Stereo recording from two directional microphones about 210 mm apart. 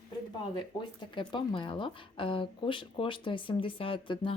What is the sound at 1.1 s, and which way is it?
Speech, 25° left (ahead or behind).